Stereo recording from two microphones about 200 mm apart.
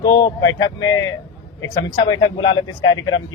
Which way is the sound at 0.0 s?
20° left (ahead or behind).